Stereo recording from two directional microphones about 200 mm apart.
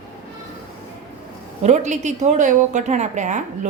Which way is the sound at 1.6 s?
35° right (ahead or behind).